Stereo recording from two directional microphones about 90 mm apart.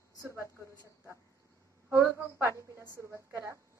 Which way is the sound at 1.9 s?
30° right (ahead or behind).